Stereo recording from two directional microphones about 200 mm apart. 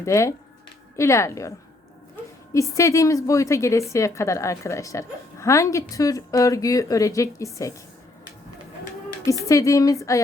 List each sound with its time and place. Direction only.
0.0 s a woman's voice: 15° left (ahead or behind)
9.2 s a woman's voice: 15° left (ahead or behind)